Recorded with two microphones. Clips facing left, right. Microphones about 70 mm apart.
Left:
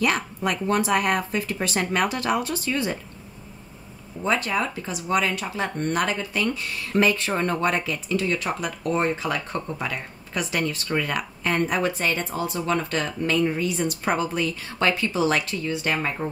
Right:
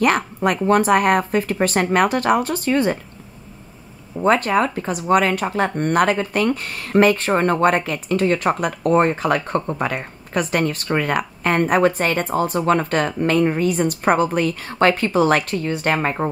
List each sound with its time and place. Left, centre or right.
0.0 s speech: right
4.2 s speech: right